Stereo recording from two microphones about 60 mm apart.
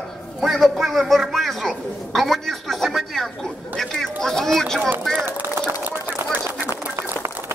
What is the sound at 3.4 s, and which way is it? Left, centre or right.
Chatter, centre.